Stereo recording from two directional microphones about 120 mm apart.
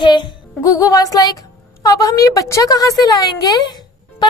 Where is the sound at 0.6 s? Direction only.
25° left (ahead or behind).